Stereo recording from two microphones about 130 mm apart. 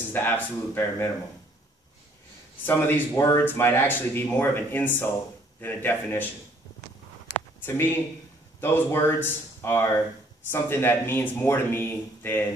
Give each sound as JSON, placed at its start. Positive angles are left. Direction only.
{"t": 0.1, "sound": "speech", "side_deg": 15}
{"t": 2.6, "sound": "speech", "side_deg": 15}
{"t": 7.3, "sound": "a sound", "side_deg": 15}
{"t": 8.5, "sound": "speech", "side_deg": 20}